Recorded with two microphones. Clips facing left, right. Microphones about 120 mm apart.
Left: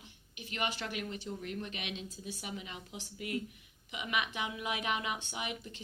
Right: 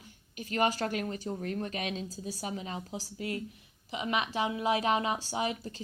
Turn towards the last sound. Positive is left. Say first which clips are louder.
# right 8 dB
turn(degrees=-35)  # may be behind; listen again after turning